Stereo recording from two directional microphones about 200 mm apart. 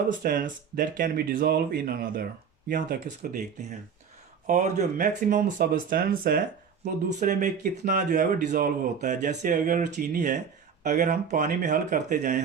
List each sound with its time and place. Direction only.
0.2 s speech: 45° right (ahead or behind)
4.4 s speech: 35° right (ahead or behind)